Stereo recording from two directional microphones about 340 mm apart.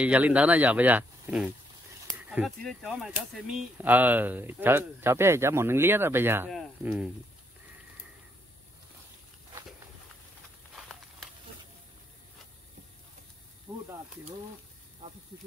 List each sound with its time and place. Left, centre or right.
0.0 s speech: centre
13.7 s snake: centre